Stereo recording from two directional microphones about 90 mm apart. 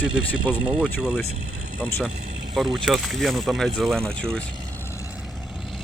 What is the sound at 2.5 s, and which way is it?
Speech, centre (ahead or behind).